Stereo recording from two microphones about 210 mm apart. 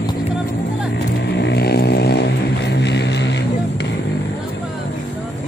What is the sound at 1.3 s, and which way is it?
Vehicle, 50° left (ahead or behind).